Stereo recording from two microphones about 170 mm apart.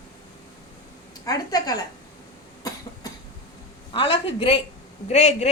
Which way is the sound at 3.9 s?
30° left (ahead or behind).